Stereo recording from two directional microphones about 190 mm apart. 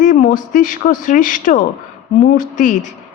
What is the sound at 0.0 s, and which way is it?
A man's voice, 40° left (ahead or behind).